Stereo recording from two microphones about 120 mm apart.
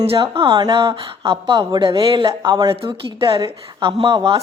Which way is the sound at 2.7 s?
45° right (ahead or behind).